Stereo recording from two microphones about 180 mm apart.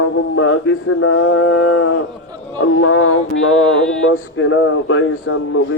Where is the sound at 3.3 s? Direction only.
90° left.